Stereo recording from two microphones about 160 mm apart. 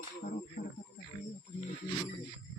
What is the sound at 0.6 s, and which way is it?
Speech, 45° left (ahead or behind).